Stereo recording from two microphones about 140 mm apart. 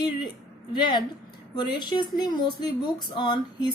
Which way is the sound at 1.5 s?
30° left (ahead or behind).